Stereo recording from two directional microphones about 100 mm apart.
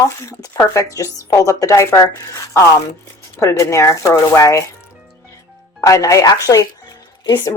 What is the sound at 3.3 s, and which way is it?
A woman's voice, 30° left (ahead or behind).